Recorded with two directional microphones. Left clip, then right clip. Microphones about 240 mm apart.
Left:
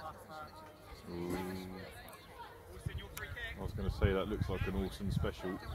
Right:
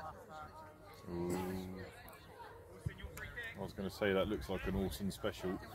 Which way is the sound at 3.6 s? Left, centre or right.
Right.